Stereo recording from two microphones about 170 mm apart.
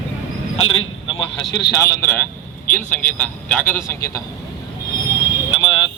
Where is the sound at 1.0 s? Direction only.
30° left (ahead or behind).